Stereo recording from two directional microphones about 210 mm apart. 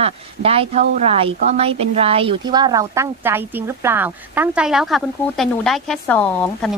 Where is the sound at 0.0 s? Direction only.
25° right (ahead or behind).